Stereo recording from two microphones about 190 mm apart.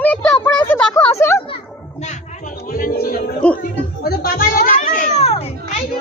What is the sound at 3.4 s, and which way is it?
Speech, 5° left (ahead or behind).